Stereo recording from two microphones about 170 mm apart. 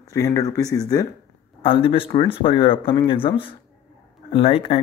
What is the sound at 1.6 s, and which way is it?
Speech, 30° left (ahead or behind).